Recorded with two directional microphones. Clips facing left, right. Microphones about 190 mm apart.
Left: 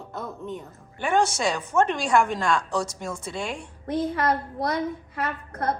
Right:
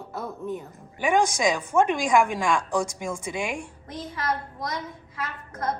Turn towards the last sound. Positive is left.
turn(degrees=60)  # may be behind; listen again after turning